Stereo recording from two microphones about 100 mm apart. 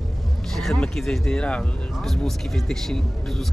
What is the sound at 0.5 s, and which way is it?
Speech, 5° left (ahead or behind).